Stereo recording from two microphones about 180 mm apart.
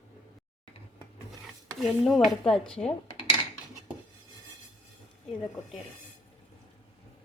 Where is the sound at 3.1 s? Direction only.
30° left (ahead or behind).